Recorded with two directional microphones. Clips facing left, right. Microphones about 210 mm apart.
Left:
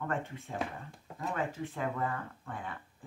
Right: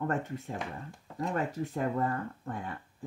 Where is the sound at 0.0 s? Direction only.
40° right (ahead or behind).